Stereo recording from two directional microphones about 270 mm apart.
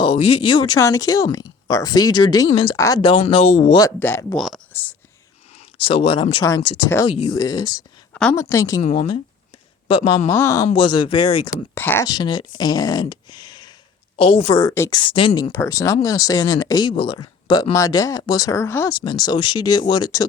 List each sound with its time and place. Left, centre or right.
0.0 s a sound: centre
0.3 s speech: centre
3.8 s speech: centre
4.4 s a sound: centre
5.7 s speech: centre
6.6 s speech: left
6.9 s speech: centre
11.7 s speech: centre